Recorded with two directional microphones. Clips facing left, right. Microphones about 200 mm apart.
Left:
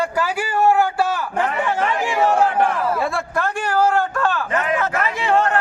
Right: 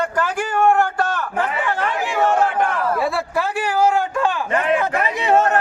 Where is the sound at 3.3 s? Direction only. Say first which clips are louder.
Even; 10° right (ahead or behind).